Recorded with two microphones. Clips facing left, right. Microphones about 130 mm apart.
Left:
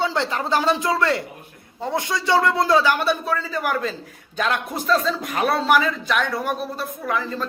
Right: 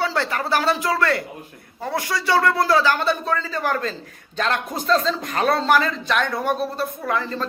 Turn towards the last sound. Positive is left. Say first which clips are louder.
# right 1 dB
turn(degrees=5)  # may be behind; listen again after turning